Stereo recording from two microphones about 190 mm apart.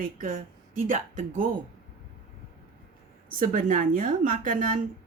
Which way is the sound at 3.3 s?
45° right (ahead or behind).